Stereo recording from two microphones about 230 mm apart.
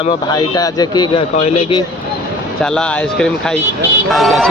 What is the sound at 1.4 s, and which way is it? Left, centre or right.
Speech, left.